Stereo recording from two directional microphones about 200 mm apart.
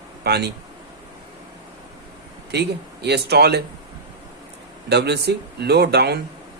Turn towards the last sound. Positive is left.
turn(degrees=-55)  # may be behind; listen again after turning